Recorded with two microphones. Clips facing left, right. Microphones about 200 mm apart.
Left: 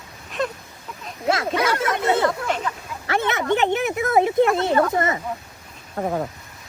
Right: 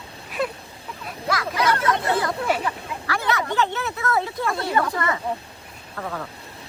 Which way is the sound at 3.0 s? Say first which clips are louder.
Left 3 dB; 20° left (ahead or behind).